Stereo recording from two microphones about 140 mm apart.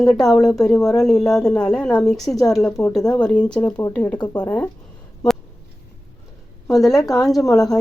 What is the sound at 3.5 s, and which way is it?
Speech, 30° left (ahead or behind).